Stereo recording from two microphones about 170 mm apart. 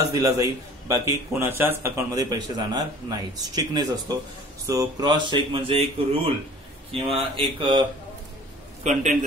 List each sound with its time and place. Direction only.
0.0 s a man's voice: 20° right (ahead or behind)
6.9 s speech: 35° right (ahead or behind)
8.8 s a man's voice: 45° right (ahead or behind)